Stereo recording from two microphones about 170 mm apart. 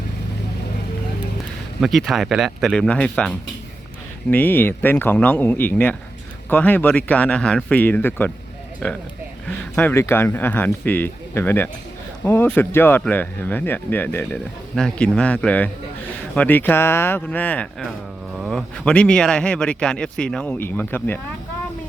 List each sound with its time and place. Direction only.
1.8 s speech: centre (ahead or behind)